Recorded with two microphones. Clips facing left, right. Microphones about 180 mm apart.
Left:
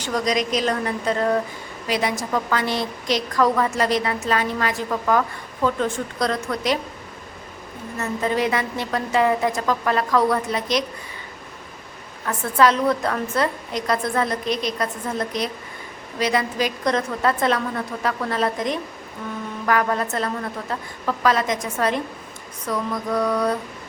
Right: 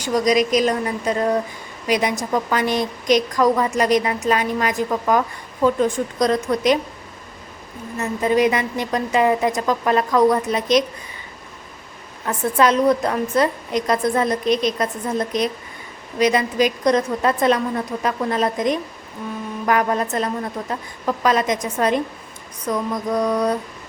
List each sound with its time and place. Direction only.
0.0 s a woman's voice: 10° right (ahead or behind)
7.9 s a woman's voice: 15° right (ahead or behind)
12.2 s a woman's voice: 20° right (ahead or behind)